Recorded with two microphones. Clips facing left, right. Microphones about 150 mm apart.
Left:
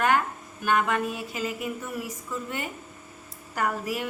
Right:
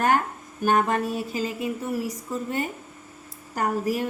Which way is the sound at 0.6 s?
40° right (ahead or behind).